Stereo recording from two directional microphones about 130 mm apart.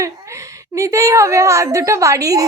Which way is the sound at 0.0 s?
25° right (ahead or behind).